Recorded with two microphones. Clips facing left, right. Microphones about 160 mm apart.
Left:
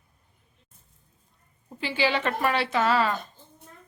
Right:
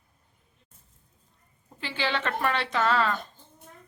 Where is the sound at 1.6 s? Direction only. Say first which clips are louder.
Left 5 dB; 10° left (ahead or behind).